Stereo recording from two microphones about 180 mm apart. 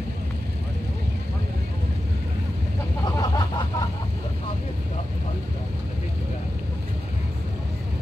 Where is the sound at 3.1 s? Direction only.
20° left (ahead or behind).